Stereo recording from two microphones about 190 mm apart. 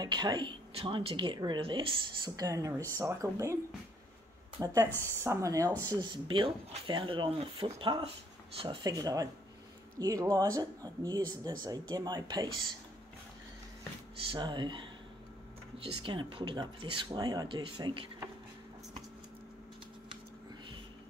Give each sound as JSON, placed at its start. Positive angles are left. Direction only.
{"t": 0.0, "sound": "speech", "side_deg": -20}
{"t": 4.6, "sound": "speech", "side_deg": -15}
{"t": 14.3, "sound": "speech", "side_deg": -25}